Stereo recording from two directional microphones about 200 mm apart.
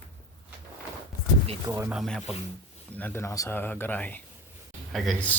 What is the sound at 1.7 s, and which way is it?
Speech, 15° right (ahead or behind).